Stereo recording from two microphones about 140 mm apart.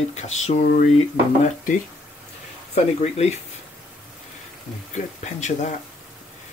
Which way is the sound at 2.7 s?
55° left (ahead or behind).